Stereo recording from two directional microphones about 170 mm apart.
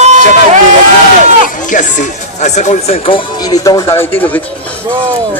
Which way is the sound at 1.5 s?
50° left (ahead or behind).